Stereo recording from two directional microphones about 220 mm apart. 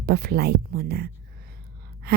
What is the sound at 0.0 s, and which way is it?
A woman's voice, 45° right (ahead or behind).